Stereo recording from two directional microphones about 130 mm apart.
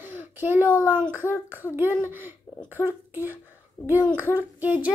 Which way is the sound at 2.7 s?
15° right (ahead or behind).